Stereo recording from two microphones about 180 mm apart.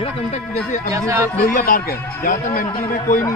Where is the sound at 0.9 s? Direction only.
15° right (ahead or behind).